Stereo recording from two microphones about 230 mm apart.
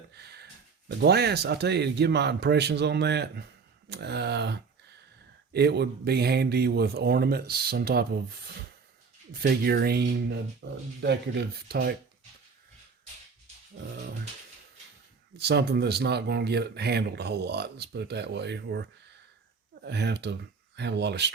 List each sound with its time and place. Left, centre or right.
0.1 s a sound: right
0.9 s speech: right
9.4 s speech: right
15.4 s speech: right